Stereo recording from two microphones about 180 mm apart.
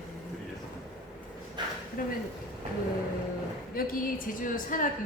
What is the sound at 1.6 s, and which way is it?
Speech, 25° right (ahead or behind).